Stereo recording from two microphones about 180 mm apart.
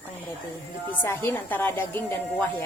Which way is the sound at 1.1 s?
10° left (ahead or behind).